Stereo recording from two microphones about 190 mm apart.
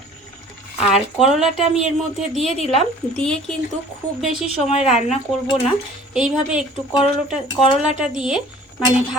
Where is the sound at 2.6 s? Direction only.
35° left (ahead or behind).